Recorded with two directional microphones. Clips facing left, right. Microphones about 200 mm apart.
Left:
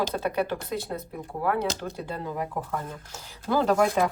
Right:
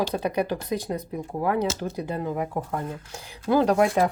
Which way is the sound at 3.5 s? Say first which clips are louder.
Right 4 dB; 15° right (ahead or behind).